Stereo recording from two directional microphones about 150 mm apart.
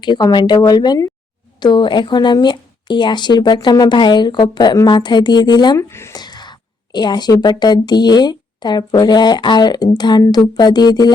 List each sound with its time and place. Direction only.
0.0 s speech: 30° left (ahead or behind)
5.9 s a woman's voice: 15° left (ahead or behind)